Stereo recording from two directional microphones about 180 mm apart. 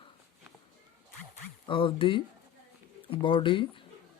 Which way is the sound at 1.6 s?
30° left (ahead or behind).